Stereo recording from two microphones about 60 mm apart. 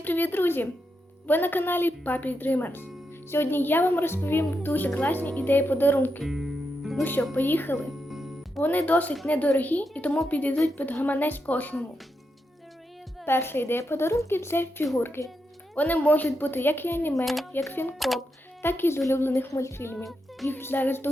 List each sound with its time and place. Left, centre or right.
0.0 s speech: left
6.2 s music: centre
7.3 s speech: left
8.0 s music: centre
8.6 s a woman's voice: left
13.2 s speech: left
15.7 s speech: left
17.2 s speech: centre
17.7 s speech: left